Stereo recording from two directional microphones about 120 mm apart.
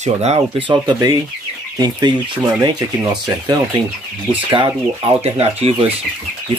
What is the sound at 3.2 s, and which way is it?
Speech, 30° right (ahead or behind).